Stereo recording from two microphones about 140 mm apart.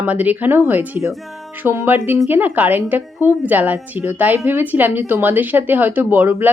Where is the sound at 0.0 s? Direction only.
10° right (ahead or behind).